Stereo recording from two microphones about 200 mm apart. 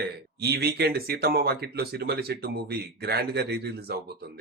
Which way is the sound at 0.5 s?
50° right (ahead or behind).